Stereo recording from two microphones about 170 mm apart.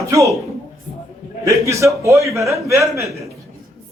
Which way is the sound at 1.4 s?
20° right (ahead or behind).